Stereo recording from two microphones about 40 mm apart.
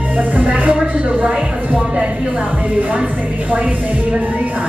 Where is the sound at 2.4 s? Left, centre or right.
Right.